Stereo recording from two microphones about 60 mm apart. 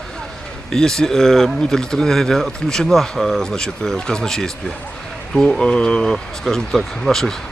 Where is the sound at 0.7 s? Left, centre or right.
Centre.